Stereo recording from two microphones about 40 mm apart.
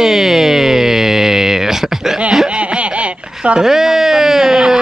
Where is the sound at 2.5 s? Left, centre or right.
Right.